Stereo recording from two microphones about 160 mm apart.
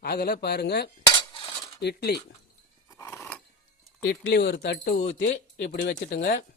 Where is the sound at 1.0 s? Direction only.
30° left (ahead or behind).